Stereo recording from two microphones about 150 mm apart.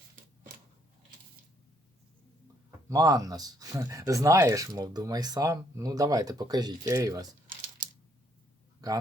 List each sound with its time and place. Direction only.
2.9 s speech: 25° right (ahead or behind)